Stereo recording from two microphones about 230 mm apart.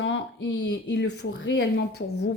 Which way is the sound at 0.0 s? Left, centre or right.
Left.